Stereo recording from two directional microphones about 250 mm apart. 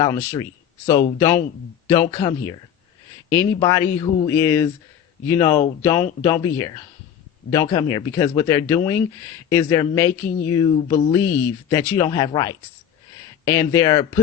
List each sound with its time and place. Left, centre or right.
0.0 s speech: centre